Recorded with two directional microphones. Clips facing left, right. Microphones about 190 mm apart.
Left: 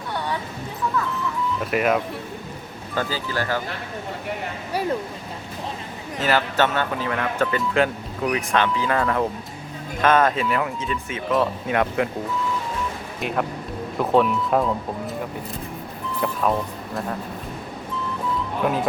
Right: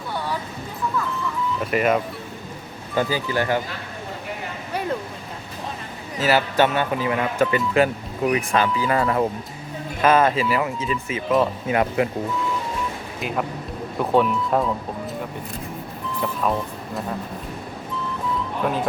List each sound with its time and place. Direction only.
1.5 s speech: centre (ahead or behind)
2.9 s speech: 15° right (ahead or behind)
6.1 s speech: 10° right (ahead or behind)
13.1 s speech: centre (ahead or behind)
16.2 s speech: centre (ahead or behind)
18.6 s speech: centre (ahead or behind)